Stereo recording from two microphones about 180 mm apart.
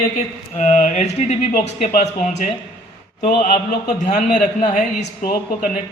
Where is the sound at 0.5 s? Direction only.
40° left (ahead or behind).